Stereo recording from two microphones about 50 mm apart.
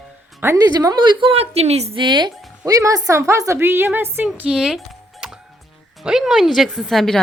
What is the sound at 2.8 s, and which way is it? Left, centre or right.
A woman's voice, right.